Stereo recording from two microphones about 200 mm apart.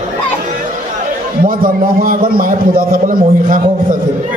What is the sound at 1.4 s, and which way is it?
A man's voice, 45° right (ahead or behind).